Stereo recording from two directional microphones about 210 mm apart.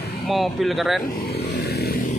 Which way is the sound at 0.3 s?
Centre (ahead or behind).